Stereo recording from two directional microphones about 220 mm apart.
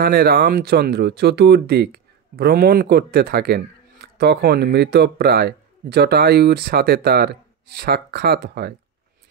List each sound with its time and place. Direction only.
0.0 s speech: 45° right (ahead or behind)